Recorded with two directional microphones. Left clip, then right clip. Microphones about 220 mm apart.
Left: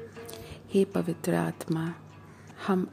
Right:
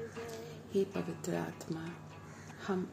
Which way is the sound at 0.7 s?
45° left (ahead or behind).